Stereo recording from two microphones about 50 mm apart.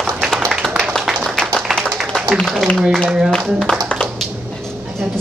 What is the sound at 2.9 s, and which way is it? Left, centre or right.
Speech, centre.